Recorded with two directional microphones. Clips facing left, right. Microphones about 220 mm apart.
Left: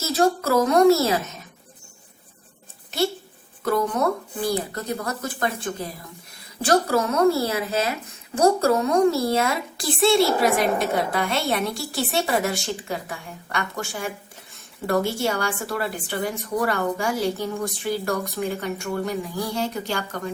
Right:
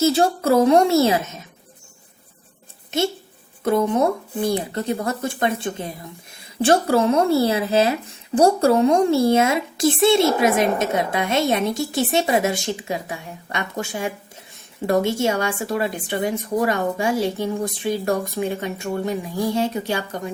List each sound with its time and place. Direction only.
0.1 s a woman's voice: 30° right (ahead or behind)
3.6 s a woman's voice: 25° right (ahead or behind)